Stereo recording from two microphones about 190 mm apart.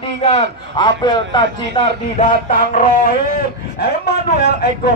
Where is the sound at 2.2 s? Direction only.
45° left (ahead or behind).